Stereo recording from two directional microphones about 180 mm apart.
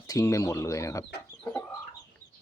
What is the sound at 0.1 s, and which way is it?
Speech, 20° left (ahead or behind).